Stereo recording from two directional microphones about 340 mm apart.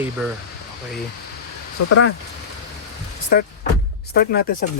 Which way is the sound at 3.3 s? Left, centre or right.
Left.